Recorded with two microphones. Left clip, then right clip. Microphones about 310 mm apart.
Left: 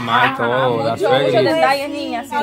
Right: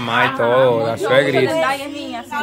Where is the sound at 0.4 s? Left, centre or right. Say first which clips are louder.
Right 3 dB; centre.